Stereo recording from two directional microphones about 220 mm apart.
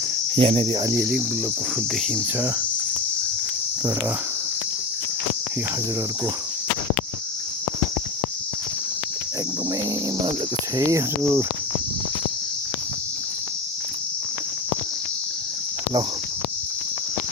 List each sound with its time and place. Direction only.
0.3 s cricket: 25° right (ahead or behind)
10.8 s cricket: 15° right (ahead or behind)